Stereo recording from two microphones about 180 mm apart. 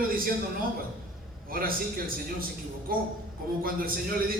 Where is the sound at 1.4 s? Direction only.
55° right (ahead or behind).